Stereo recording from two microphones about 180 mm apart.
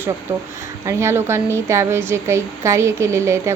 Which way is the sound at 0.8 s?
15° right (ahead or behind).